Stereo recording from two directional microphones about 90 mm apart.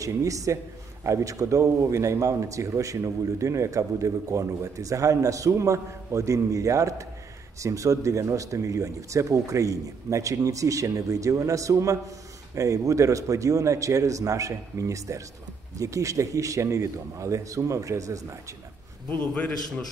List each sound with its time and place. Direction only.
0.0 s a man's voice: 40° right (ahead or behind)
19.0 s a man's voice: 15° left (ahead or behind)